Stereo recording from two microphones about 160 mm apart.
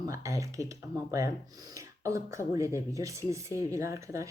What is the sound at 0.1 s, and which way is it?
Speech, 20° right (ahead or behind).